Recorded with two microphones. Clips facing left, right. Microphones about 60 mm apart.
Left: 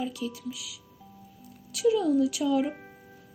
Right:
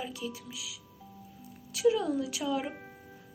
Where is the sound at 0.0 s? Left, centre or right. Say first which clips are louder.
Left 5 dB; right.